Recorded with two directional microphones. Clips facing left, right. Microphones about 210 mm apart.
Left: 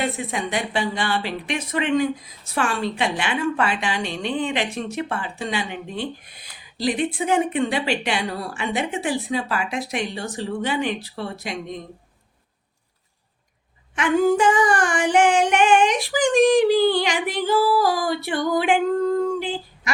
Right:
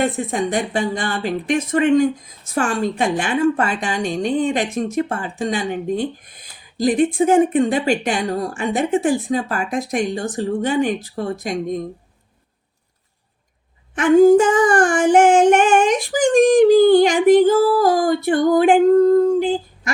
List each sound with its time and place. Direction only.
0.0 s speech: 45° right (ahead or behind)
13.9 s speech: 50° right (ahead or behind)